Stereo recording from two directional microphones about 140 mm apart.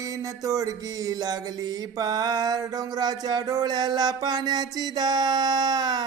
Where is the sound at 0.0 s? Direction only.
25° right (ahead or behind).